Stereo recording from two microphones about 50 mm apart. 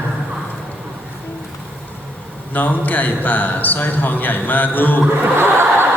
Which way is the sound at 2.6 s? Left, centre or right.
Left.